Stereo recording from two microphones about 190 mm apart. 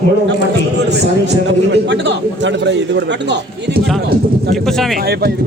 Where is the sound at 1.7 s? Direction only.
65° right (ahead or behind).